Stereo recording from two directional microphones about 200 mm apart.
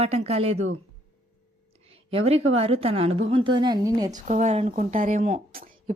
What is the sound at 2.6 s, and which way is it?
A woman's voice, 30° right (ahead or behind).